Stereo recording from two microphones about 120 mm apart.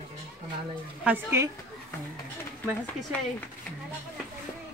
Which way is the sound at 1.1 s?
15° right (ahead or behind).